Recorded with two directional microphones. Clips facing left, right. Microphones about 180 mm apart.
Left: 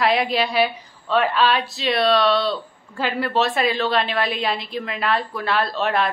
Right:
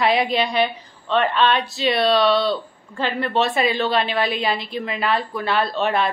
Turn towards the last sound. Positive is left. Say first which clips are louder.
# right 1 dB
turn(degrees=0)  # may be behind; listen again after turning